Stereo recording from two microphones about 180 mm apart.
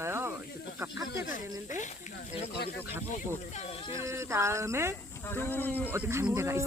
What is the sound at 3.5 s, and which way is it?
Speech, 35° left (ahead or behind).